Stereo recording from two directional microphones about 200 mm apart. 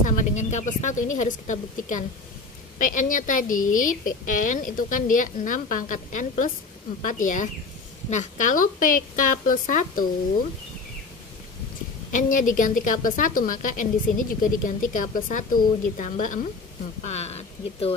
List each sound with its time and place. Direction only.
0.0 s a woman's voice: 40° left (ahead or behind)
12.1 s a woman's voice: 40° left (ahead or behind)